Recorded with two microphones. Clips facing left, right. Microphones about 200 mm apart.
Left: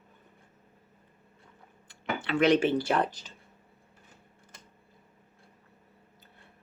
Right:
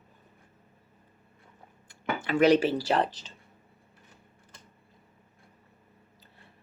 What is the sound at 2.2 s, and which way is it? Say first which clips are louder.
Speech: right 2 dB; 40° right (ahead or behind).